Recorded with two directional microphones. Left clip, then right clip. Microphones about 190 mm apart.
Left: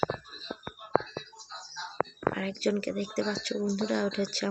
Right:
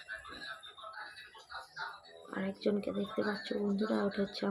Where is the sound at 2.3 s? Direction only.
5° right (ahead or behind).